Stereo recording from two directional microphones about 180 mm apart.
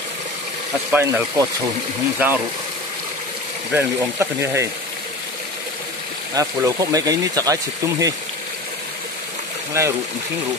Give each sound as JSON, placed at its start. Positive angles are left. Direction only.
{"t": 0.9, "sound": "speech", "side_deg": -15}
{"t": 3.7, "sound": "speech", "side_deg": -15}
{"t": 6.3, "sound": "speech", "side_deg": -20}
{"t": 9.8, "sound": "speech", "side_deg": -15}